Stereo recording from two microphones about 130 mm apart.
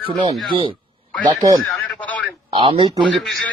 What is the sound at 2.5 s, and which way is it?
Speech, 40° right (ahead or behind).